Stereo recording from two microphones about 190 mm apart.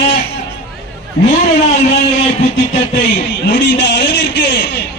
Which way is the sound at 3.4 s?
65° left (ahead or behind).